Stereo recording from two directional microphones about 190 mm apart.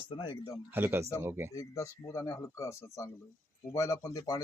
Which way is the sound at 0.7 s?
10° right (ahead or behind).